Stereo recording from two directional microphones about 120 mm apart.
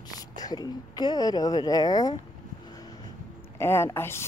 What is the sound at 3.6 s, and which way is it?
Speech, 20° left (ahead or behind).